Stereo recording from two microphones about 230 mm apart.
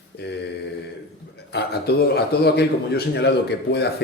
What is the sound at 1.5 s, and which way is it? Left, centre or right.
Speech, left.